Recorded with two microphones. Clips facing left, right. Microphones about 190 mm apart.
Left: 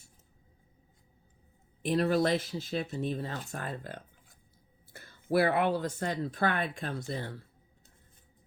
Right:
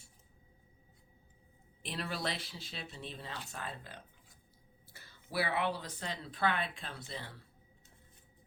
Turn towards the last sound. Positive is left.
turn(degrees=45)  # may be behind; listen again after turning